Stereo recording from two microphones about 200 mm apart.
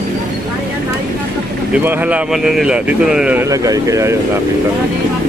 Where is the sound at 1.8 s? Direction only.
10° right (ahead or behind).